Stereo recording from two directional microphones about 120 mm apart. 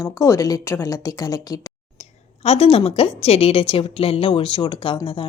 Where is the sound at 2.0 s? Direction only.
60° left (ahead or behind); by 4.9 s 40° left (ahead or behind).